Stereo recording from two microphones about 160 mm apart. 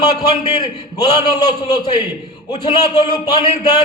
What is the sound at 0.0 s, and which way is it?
A man's voice, 25° left (ahead or behind).